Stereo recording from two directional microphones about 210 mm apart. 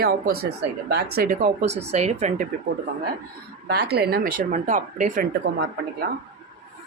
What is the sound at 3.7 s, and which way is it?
Speech, 50° right (ahead or behind).